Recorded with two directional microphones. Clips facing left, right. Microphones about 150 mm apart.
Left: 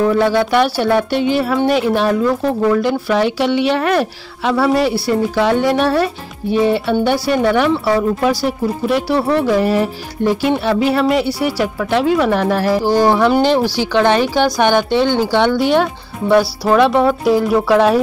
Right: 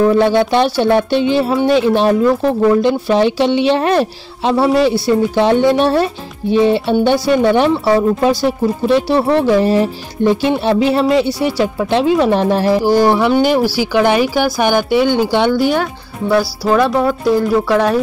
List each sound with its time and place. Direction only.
0.2 s speech: 20° right (ahead or behind)
15.5 s speech: centre (ahead or behind)